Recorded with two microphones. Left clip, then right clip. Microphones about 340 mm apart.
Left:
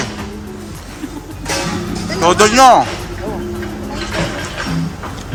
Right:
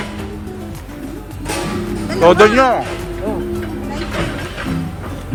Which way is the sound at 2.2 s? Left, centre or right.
Centre.